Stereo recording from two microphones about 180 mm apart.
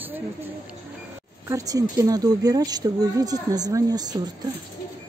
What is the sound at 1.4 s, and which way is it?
A woman's voice, 20° right (ahead or behind).